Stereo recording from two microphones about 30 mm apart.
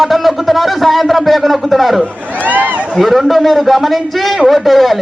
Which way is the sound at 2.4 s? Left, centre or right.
Right.